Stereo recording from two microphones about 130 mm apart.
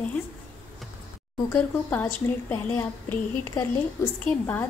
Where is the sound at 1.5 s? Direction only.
15° left (ahead or behind).